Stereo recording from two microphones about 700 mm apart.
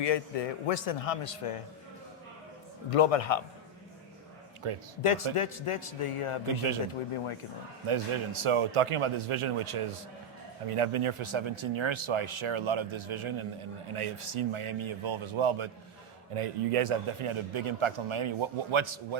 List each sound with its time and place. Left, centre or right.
0.0 s a man's voice: left
2.9 s a man's voice: left
4.6 s a man's voice: right
5.0 s a man's voice: left
7.9 s a man's voice: right